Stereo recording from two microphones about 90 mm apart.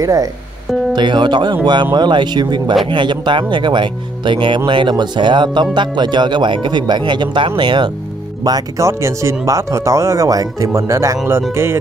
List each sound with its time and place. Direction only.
0.0 s speech: 40° right (ahead or behind)
0.9 s speech: 60° right (ahead or behind)
8.5 s speech: 45° right (ahead or behind)
8.8 s speech: 35° right (ahead or behind)